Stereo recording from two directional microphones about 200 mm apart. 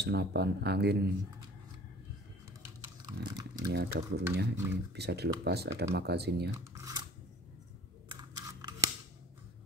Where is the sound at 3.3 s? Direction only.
20° right (ahead or behind).